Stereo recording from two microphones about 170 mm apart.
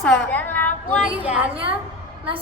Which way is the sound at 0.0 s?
5° left (ahead or behind).